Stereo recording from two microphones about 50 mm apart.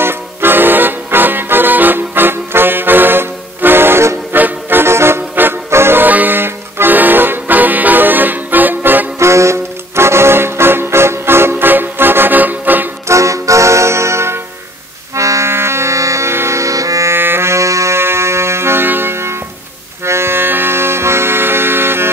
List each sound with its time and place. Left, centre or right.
0.0 s music: right
4.3 s music: right
4.8 s music: right
5.3 s music: right
5.7 s music: right
6.0 s music: right
9.2 s music: right
13.1 s music: right
15.1 s music: right
15.5 s music: right
17.1 s music: right
17.9 s music: right